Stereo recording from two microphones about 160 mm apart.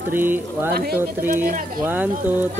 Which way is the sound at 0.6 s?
75° right (ahead or behind).